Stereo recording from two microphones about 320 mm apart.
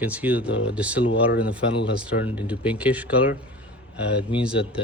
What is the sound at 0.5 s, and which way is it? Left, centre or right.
Speech, left.